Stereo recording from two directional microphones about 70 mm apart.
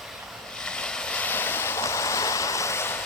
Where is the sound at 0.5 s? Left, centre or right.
Centre; by 3.0 s left.